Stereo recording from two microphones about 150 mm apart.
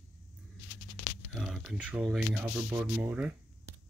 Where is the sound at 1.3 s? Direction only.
Centre (ahead or behind).